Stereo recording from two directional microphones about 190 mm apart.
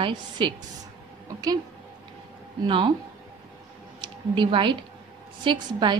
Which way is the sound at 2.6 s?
25° right (ahead or behind).